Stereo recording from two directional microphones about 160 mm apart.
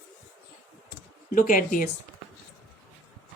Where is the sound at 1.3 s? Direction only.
60° left (ahead or behind).